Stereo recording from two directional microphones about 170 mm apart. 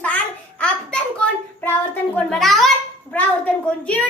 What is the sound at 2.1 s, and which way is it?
Speech, centre (ahead or behind).